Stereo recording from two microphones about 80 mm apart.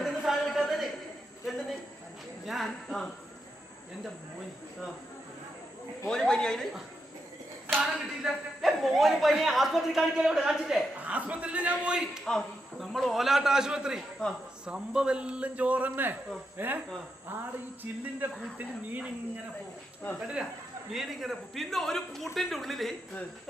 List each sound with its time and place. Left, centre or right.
0.0 s a sound: centre
2.5 s a man's voice: centre
6.1 s a woman's voice: centre
7.8 s a man's voice: centre
11.0 s a man's voice: centre
12.2 s a man's voice: centre
14.2 s a woman's voice: centre
14.6 s a man's voice: centre
18.5 s a man's voice: centre
20.1 s a man's voice: centre